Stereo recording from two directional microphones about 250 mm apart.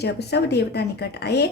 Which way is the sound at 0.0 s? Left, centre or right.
Left.